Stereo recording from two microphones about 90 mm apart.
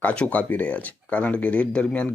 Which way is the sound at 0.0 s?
15° left (ahead or behind).